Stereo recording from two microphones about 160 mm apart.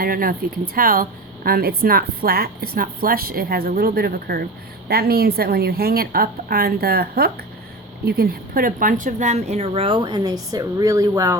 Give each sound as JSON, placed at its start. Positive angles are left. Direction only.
{"t": 0.0, "sound": "a woman's voice", "side_deg": -65}